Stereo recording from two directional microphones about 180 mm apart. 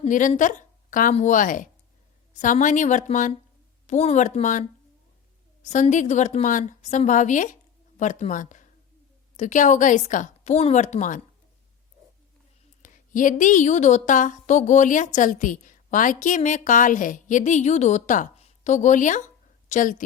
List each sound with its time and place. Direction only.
0.0 s a woman's voice: 45° left (ahead or behind)
5.6 s a woman's voice: 40° left (ahead or behind)
12.8 s a woman's voice: 45° left (ahead or behind)